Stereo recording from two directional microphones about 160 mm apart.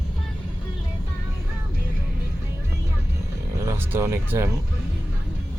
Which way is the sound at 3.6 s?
15° right (ahead or behind).